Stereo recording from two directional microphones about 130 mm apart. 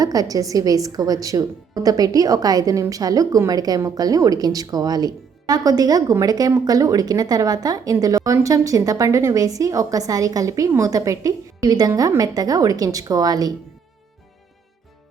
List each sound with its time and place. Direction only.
0.0 s speech: 30° right (ahead or behind)